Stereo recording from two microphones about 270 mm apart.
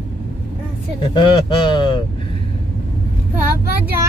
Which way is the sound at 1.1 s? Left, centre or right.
Centre.